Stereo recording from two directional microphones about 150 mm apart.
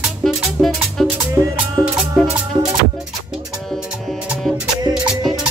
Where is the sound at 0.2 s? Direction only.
Centre (ahead or behind).